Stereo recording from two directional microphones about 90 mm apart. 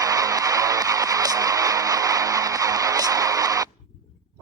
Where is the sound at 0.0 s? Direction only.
40° right (ahead or behind).